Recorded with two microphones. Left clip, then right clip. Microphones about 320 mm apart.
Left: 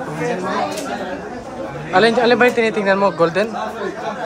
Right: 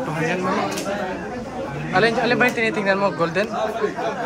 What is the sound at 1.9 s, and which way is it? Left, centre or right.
Speech, centre.